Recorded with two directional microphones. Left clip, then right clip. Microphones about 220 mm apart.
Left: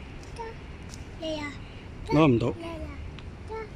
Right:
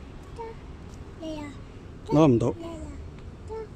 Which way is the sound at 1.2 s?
10° right (ahead or behind).